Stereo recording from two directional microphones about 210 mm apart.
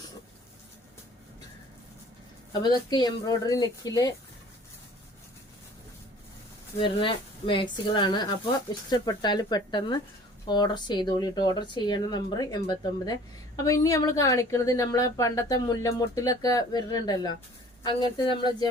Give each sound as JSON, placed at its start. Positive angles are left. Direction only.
{"t": 2.5, "sound": "speech", "side_deg": 20}
{"t": 6.8, "sound": "a woman's voice", "side_deg": 25}